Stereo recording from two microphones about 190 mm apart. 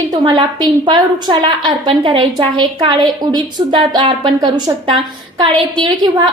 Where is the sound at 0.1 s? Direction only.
20° right (ahead or behind).